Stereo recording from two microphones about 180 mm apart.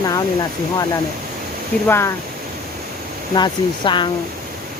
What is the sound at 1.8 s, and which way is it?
Speech, 15° left (ahead or behind).